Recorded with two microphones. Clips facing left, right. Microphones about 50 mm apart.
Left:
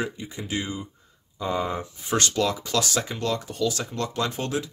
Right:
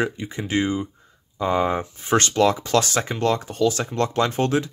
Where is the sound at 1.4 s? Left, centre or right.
Right.